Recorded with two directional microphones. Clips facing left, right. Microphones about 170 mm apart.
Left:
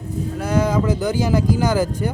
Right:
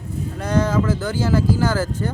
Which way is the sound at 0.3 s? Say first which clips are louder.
Even; 10° left (ahead or behind).